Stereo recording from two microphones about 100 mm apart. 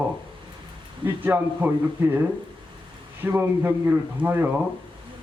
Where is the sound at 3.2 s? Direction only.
20° right (ahead or behind).